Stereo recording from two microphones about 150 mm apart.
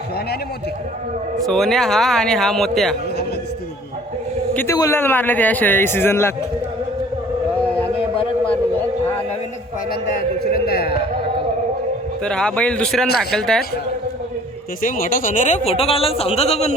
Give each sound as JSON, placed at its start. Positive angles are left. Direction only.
{"t": 1.4, "sound": "speech", "side_deg": 0}
{"t": 4.5, "sound": "a man's voice", "side_deg": 20}
{"t": 9.9, "sound": "speech", "side_deg": 90}
{"t": 12.2, "sound": "speech", "side_deg": 5}
{"t": 14.8, "sound": "speech", "side_deg": 60}